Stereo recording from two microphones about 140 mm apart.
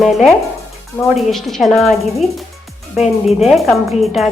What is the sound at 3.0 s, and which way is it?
A woman's voice, centre (ahead or behind).